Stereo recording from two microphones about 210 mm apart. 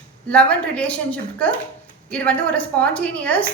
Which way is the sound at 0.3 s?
5° left (ahead or behind).